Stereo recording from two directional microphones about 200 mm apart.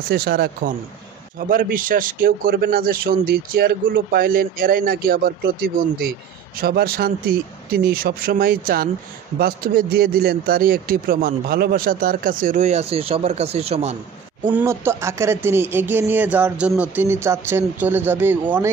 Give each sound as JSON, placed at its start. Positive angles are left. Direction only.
{"t": 0.1, "sound": "a man's voice", "side_deg": -50}
{"t": 14.5, "sound": "speech", "side_deg": -10}